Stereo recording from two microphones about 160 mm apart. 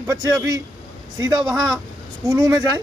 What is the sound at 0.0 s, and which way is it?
Speech, 20° right (ahead or behind).